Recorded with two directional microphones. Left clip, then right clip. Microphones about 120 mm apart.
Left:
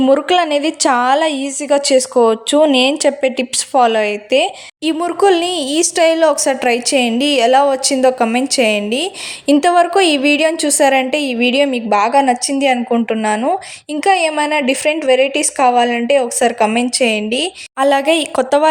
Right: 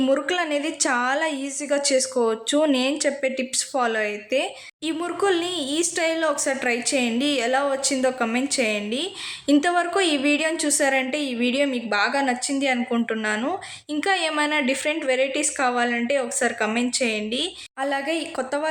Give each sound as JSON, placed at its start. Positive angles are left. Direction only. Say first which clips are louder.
{"t": 0.0, "sound": "a woman's voice", "louder": "left 10 dB", "side_deg": 55}
{"t": 2.7, "sound": "a woman's voice", "louder": "left 10 dB", "side_deg": 55}